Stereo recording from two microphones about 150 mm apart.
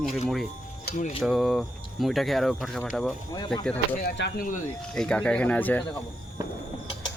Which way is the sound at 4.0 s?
75° left (ahead or behind).